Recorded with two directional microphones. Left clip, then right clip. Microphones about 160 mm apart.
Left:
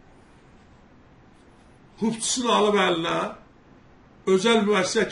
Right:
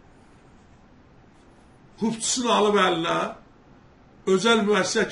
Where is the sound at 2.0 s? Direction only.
5° right (ahead or behind).